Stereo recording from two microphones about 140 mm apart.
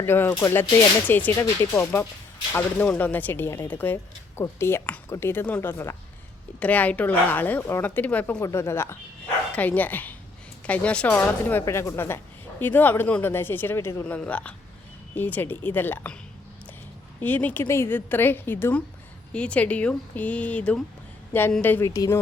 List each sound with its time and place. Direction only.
0.0 s speech: 15° left (ahead or behind)
8.4 s speech: 20° left (ahead or behind)
17.2 s speech: 10° left (ahead or behind)